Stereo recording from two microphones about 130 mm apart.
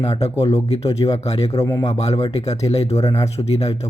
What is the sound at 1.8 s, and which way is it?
A man's voice, 55° left (ahead or behind).